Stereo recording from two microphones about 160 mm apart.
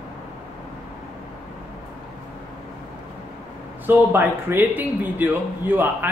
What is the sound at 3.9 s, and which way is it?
A man's voice, 15° right (ahead or behind).